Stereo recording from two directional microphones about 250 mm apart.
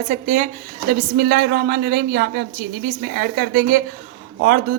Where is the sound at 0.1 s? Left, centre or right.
Right.